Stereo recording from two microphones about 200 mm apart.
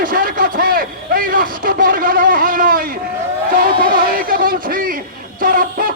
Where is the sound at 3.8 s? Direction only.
45° right (ahead or behind).